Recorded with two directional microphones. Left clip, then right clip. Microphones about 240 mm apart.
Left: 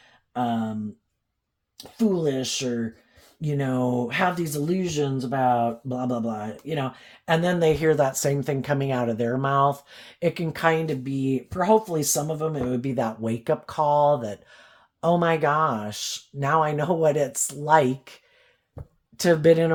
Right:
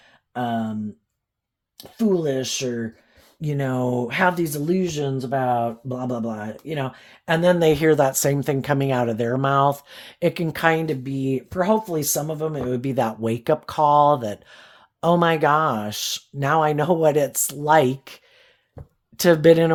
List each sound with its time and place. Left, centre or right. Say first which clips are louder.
0.3 s speech: right 1 dB; right
1.8 s speech: right 2 dB; right